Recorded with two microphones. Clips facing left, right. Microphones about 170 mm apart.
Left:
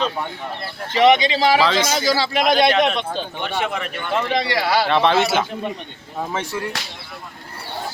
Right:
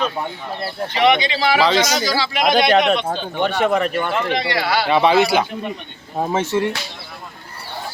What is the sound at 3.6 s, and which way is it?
Speech, 40° right (ahead or behind).